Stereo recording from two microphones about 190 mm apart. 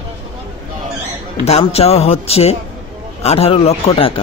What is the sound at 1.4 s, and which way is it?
A man's voice, 30° left (ahead or behind).